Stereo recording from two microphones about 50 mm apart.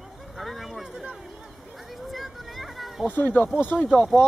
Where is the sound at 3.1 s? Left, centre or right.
Left.